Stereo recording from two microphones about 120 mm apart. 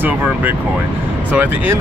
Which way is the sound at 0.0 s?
15° right (ahead or behind).